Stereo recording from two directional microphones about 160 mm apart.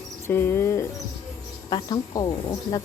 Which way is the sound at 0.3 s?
15° left (ahead or behind).